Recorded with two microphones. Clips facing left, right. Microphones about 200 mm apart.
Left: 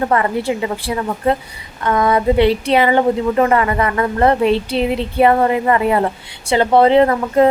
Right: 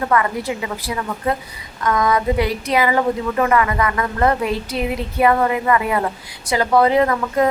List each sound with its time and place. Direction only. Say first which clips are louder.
0.0 s a woman's voice: left 3 dB; 30° left (ahead or behind)